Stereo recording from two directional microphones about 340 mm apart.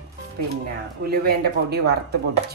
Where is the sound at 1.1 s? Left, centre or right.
Right.